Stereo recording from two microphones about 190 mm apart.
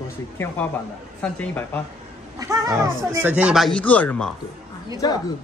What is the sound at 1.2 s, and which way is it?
Speech, 10° left (ahead or behind).